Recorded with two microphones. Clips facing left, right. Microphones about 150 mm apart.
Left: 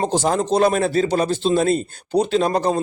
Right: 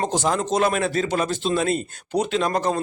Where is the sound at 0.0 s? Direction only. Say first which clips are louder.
Left 3 dB; 35° left (ahead or behind).